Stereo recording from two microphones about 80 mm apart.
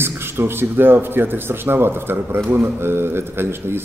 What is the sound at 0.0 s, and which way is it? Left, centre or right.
A man's voice, right.